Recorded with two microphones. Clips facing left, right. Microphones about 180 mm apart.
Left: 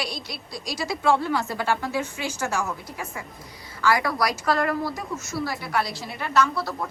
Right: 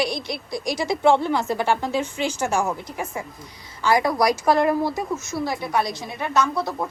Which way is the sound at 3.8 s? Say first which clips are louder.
Right 4 dB; 20° right (ahead or behind).